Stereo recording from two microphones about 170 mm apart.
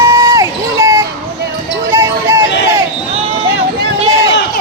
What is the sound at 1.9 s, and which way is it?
Music, 15° right (ahead or behind).